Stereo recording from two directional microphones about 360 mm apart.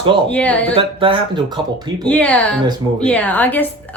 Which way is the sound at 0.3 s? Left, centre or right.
Centre.